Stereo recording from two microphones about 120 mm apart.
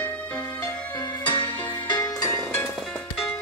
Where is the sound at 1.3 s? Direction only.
40° left (ahead or behind).